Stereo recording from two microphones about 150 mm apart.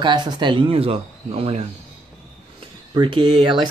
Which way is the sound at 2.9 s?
30° right (ahead or behind).